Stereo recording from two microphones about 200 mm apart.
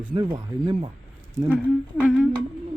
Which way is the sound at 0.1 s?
20° right (ahead or behind).